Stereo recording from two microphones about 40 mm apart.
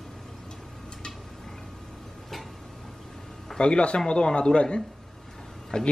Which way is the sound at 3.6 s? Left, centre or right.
Left.